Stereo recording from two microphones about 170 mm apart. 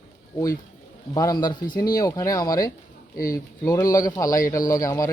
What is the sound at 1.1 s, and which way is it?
A man's voice, 20° left (ahead or behind).